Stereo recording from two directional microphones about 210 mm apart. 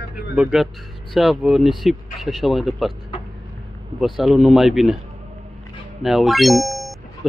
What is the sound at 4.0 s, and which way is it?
Speech, centre (ahead or behind).